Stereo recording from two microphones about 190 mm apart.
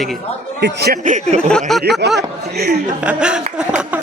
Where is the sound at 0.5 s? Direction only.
60° right (ahead or behind).